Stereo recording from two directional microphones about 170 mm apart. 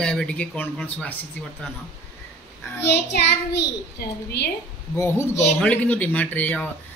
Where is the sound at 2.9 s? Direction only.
80° left.